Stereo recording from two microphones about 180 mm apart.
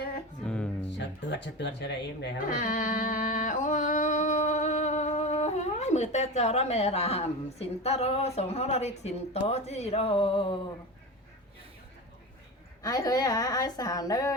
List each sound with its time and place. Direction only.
0.4 s music: 5° left (ahead or behind)
0.9 s speech: 80° left
2.5 s a sound: 50° left (ahead or behind); by 10.6 s 30° left (ahead or behind)
12.8 s a woman's voice: 20° left (ahead or behind)